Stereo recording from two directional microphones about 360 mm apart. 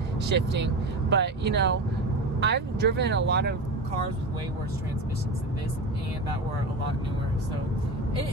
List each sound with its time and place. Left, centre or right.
0.3 s speech: right